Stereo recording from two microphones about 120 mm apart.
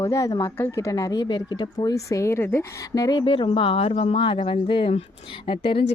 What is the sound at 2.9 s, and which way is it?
Speech, 35° left (ahead or behind).